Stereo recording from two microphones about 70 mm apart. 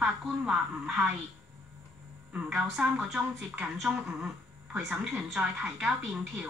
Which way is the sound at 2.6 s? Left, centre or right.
Centre.